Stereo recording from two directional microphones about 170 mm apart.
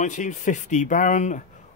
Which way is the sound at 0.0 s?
45° left (ahead or behind).